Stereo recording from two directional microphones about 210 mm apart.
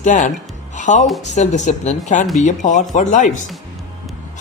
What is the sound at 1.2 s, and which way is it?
A woman's voice, 35° left (ahead or behind).